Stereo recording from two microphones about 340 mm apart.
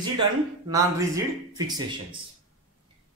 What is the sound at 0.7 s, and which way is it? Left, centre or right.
Speech, centre.